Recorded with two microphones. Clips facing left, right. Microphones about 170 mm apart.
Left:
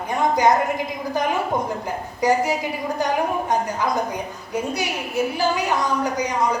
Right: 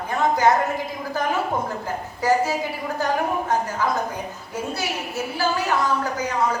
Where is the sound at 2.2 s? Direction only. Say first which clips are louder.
Left 1 dB; 15° left (ahead or behind).